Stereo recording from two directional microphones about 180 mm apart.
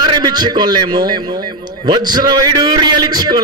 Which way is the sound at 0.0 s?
25° right (ahead or behind).